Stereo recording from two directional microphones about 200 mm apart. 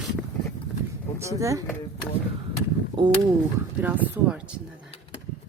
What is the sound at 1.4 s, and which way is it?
Speech, 15° right (ahead or behind).